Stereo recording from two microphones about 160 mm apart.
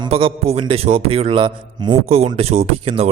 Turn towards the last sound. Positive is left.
turn(degrees=-35)  # may be behind; listen again after turning